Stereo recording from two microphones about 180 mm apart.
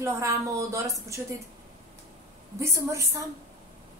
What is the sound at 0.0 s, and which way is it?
Speech, 15° right (ahead or behind).